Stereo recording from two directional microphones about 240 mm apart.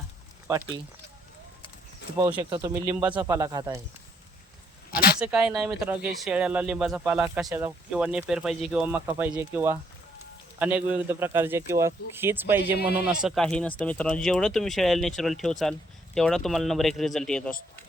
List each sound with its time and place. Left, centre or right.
2.1 s a man's voice: centre
4.9 s a sound: left
5.2 s a man's voice: centre